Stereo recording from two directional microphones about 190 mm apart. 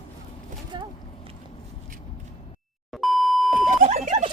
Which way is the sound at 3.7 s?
40° right (ahead or behind).